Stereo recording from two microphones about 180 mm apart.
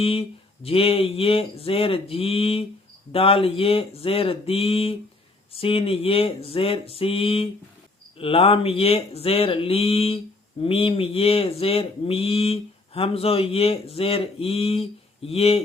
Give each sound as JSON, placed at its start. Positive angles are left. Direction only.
{"t": 0.0, "sound": "speech", "side_deg": 30}